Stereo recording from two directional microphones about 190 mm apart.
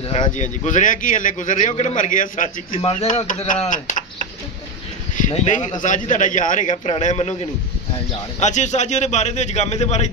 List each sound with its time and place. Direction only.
0.1 s a man's voice: 35° left (ahead or behind)
2.7 s speech: 30° left (ahead or behind)
3.3 s a man's voice: 45° left (ahead or behind)
5.1 s a man's voice: 40° left (ahead or behind)
8.4 s a man's voice: 40° left (ahead or behind)